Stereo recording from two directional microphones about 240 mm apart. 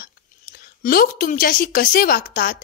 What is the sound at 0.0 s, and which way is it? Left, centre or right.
A woman's voice, left.